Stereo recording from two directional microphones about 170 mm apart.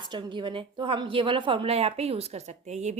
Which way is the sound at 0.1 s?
30° right (ahead or behind).